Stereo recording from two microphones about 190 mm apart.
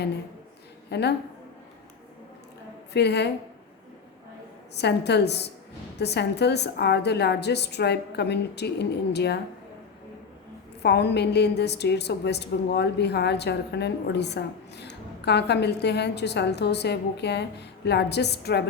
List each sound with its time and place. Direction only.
0.9 s a woman's voice: 60° left (ahead or behind)
2.9 s a woman's voice: 60° left (ahead or behind)
4.7 s a woman's voice: 60° left (ahead or behind)
10.8 s a woman's voice: 60° left (ahead or behind)